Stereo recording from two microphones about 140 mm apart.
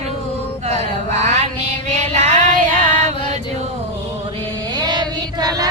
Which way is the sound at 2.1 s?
55° right (ahead or behind).